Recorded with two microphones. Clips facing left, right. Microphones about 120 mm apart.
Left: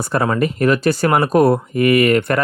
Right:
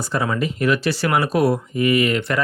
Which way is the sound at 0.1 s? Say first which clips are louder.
Left 5 dB; 55° left (ahead or behind).